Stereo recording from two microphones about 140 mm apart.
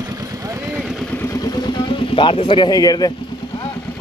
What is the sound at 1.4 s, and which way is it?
Vehicle, 30° left (ahead or behind).